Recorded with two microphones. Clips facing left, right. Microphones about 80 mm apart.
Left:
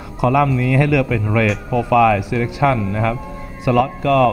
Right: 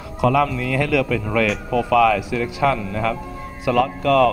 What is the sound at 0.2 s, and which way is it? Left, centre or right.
Speech, left.